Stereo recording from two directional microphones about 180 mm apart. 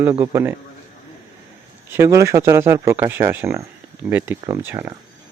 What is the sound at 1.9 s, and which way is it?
Speech, 15° right (ahead or behind).